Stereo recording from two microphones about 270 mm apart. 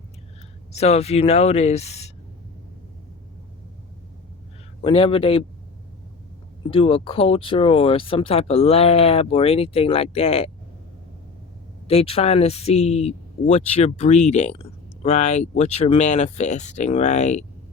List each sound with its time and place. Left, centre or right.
0.7 s speech: left
4.8 s speech: centre
6.7 s speech: centre
11.9 s speech: left